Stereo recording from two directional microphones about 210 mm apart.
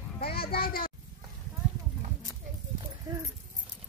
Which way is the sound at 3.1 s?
20° right (ahead or behind).